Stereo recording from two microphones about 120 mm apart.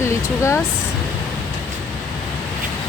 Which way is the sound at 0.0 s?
25° left (ahead or behind).